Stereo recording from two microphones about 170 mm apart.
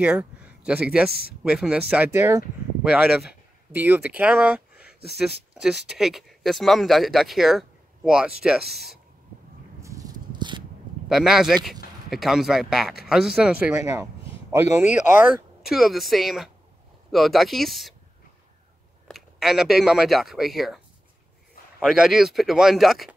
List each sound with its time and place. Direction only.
0.0 s speech: 10° right (ahead or behind)
2.8 s speech: 5° right (ahead or behind)
5.5 s a sound: 5° right (ahead or behind)
5.9 s speech: centre (ahead or behind)
9.8 s a sound: 20° right (ahead or behind)
11.1 s speech: centre (ahead or behind)
15.6 s speech: centre (ahead or behind)
19.0 s speech: centre (ahead or behind)